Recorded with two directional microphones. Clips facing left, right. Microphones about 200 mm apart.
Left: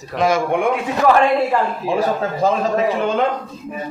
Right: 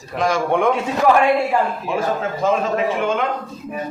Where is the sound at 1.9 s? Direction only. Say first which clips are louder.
Left 2 dB; 35° left (ahead or behind).